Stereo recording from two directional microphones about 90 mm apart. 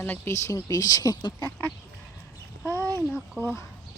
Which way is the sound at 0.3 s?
35° left (ahead or behind).